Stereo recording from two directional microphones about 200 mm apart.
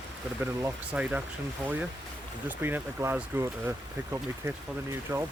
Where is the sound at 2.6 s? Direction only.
10° right (ahead or behind).